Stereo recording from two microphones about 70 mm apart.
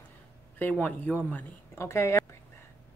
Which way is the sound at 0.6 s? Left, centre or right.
Left.